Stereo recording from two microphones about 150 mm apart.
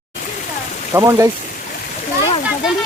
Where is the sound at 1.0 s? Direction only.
20° right (ahead or behind).